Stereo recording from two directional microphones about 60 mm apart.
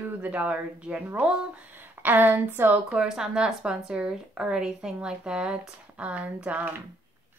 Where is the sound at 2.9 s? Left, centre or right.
Centre.